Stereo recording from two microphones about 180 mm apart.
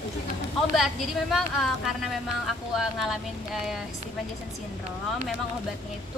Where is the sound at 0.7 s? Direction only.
Centre (ahead or behind).